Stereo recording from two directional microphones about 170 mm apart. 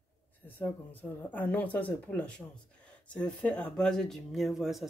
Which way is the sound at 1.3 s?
10° left (ahead or behind).